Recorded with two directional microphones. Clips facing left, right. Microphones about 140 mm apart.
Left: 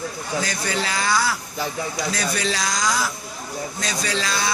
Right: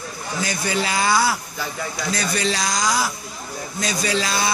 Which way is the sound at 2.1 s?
5° left (ahead or behind).